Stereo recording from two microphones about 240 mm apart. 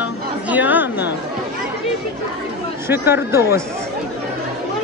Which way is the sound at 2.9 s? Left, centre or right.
Centre.